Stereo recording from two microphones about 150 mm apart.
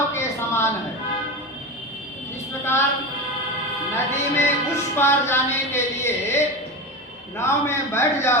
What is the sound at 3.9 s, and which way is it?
A woman's voice, 15° left (ahead or behind).